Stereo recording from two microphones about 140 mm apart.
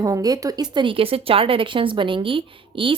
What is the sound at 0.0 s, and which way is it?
A woman's voice, 25° right (ahead or behind).